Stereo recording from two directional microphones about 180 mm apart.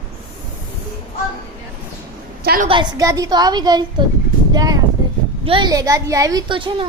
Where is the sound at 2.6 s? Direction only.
25° right (ahead or behind).